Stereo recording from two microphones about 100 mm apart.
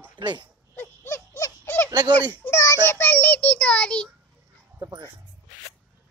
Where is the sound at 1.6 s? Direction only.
20° left (ahead or behind).